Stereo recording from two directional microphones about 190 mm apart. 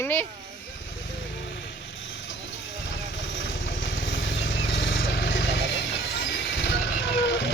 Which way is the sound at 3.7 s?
85° left.